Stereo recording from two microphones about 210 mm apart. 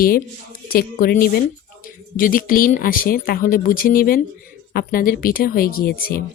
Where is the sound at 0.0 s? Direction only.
40° left (ahead or behind).